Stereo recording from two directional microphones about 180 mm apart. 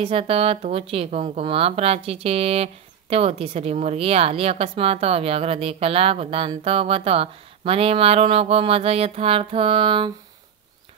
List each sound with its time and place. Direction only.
0.0 s speech: 30° right (ahead or behind)